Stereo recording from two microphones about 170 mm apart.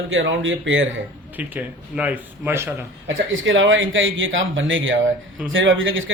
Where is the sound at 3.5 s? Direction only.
90° right.